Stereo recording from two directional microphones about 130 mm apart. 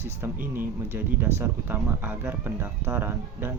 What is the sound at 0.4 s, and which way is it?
Speech, 15° right (ahead or behind).